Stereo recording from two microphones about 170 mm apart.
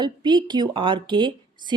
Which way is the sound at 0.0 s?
25° right (ahead or behind).